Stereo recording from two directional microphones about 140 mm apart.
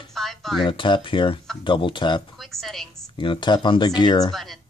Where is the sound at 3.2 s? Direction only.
35° left (ahead or behind).